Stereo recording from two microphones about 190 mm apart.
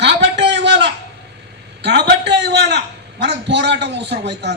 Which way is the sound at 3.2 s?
65° right (ahead or behind).